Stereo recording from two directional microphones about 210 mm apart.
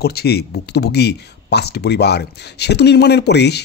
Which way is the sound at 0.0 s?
50° left (ahead or behind).